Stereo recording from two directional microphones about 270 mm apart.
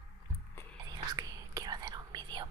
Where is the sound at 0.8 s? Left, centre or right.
Centre.